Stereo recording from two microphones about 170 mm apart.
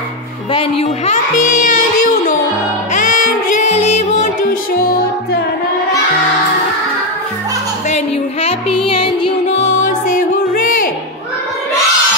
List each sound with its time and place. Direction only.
0.5 s speech: 35° left (ahead or behind); by 2.0 s 50° left (ahead or behind)
2.9 s music: 50° left (ahead or behind)
7.9 s music: 35° left (ahead or behind)
9.6 s music: 50° left (ahead or behind)